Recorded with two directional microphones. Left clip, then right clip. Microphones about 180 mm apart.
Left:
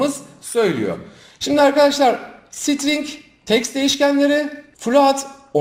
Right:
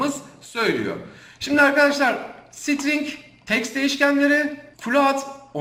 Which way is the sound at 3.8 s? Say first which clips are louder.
Left 1 dB; 25° left (ahead or behind).